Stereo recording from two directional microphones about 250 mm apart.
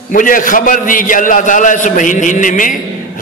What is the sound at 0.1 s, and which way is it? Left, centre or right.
A man's voice, left.